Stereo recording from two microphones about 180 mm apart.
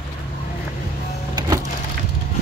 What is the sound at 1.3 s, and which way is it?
Power windows, 20° right (ahead or behind).